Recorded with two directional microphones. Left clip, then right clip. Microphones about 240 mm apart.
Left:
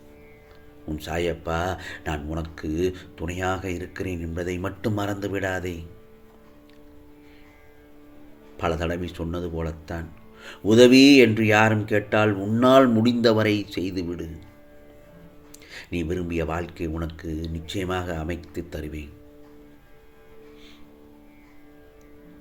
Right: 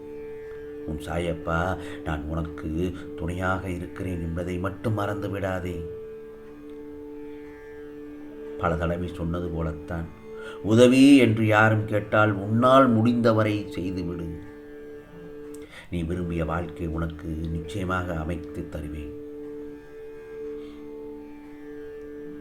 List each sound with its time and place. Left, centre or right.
0.9 s speech: left
8.5 s speech: left
15.9 s speech: left